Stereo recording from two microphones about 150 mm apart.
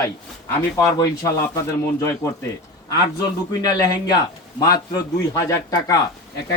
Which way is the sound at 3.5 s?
25° left (ahead or behind).